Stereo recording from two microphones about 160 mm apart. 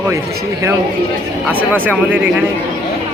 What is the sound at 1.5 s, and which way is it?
Speech, 10° right (ahead or behind).